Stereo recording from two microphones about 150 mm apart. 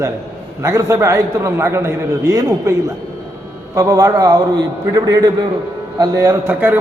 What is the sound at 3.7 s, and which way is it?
A man's voice, 20° right (ahead or behind).